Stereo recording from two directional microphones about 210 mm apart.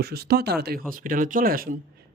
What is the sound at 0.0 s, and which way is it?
Speech, 50° right (ahead or behind).